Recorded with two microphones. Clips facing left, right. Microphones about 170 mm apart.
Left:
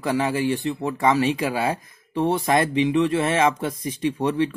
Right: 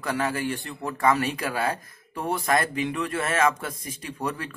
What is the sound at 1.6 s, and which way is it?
Speech, 25° left (ahead or behind).